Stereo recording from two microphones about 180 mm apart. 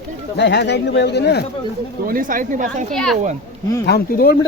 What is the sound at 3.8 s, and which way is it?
Speech, 60° left (ahead or behind).